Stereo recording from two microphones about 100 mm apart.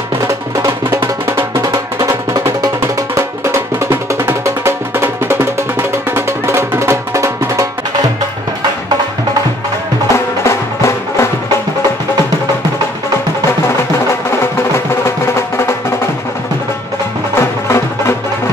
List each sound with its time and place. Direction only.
0.3 s music: 30° right (ahead or behind)
10.1 s music: 30° left (ahead or behind)
17.4 s music: 25° left (ahead or behind)